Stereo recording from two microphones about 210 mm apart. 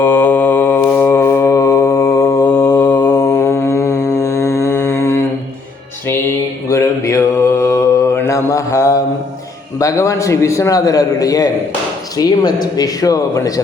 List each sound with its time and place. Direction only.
0.0 s mantra: 10° left (ahead or behind)
6.7 s mantra: 15° left (ahead or behind)
9.7 s a man's voice: 15° left (ahead or behind)